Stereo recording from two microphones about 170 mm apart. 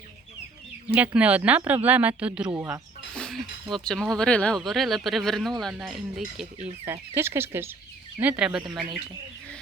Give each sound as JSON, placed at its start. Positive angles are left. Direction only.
{"t": 0.9, "sound": "speech", "side_deg": -10}
{"t": 2.6, "sound": "speech", "side_deg": -20}
{"t": 3.2, "sound": "speech", "side_deg": 0}